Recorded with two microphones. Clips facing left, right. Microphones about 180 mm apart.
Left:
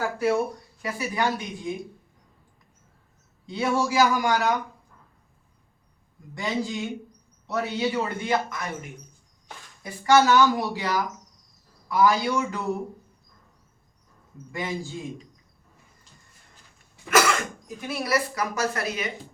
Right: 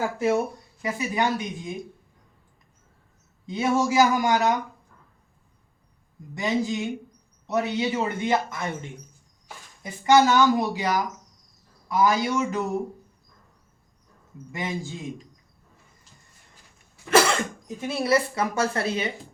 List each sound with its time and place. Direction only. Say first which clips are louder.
0.8 s speech: right 2 dB; 20° right (ahead or behind)
3.4 s speech: right 2 dB; 20° right (ahead or behind)
6.3 s speech: right 3 dB; 20° right (ahead or behind)
14.5 s speech: even; 20° right (ahead or behind)
17.1 s speech: right 2 dB; 30° right (ahead or behind)